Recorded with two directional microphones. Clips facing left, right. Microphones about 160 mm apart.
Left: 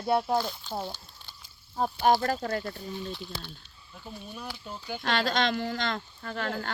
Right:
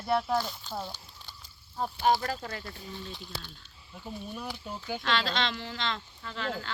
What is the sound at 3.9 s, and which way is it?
Speech, 5° right (ahead or behind).